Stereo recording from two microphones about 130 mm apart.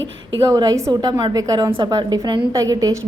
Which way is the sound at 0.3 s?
25° right (ahead or behind).